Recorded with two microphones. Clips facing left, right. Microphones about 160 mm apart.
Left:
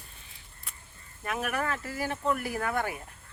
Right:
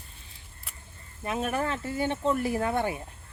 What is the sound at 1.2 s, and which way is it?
Speech, 25° right (ahead or behind).